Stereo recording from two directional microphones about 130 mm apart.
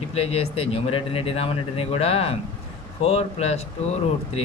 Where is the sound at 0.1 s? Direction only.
50° left (ahead or behind).